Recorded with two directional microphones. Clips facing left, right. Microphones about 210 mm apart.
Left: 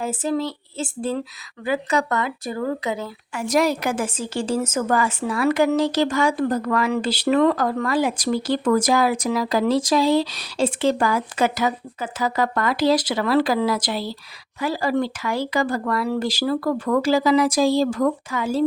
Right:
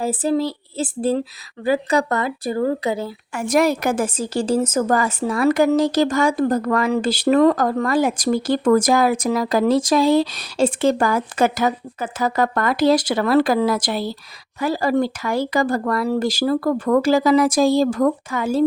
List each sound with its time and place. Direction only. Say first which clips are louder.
0.0 s speech: right 4 dB; 35° right (ahead or behind)
3.3 s a woman's voice: right 2 dB; 50° right (ahead or behind)